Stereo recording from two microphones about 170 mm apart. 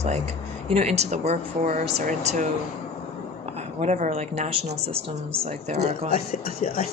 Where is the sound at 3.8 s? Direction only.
45° right (ahead or behind).